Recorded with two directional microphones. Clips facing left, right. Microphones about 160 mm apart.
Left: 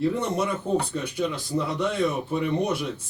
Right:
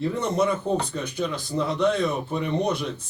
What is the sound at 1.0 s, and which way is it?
Speech, 5° left (ahead or behind).